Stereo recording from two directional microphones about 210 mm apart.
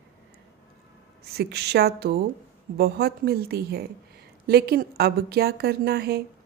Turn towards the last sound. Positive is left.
turn(degrees=-50)  # may be behind; listen again after turning